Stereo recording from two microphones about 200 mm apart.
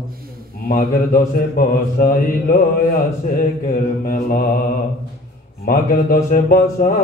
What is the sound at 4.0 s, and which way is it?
Mantra, 45° left (ahead or behind).